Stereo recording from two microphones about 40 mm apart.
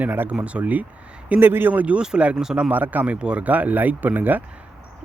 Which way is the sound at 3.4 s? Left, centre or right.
Right.